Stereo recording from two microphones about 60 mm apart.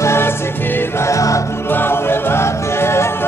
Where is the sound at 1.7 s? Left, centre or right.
Left.